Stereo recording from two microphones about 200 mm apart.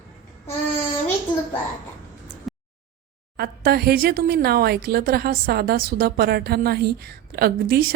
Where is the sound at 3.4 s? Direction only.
50° right (ahead or behind).